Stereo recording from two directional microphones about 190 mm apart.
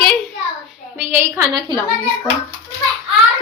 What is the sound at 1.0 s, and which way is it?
Speech, 10° right (ahead or behind).